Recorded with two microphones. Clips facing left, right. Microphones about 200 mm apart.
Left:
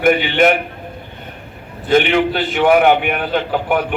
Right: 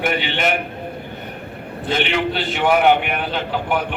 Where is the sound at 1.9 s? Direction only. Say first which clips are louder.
Left 7 dB; 50° left (ahead or behind).